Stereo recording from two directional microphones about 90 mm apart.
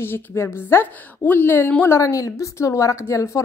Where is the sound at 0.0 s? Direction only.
30° left (ahead or behind).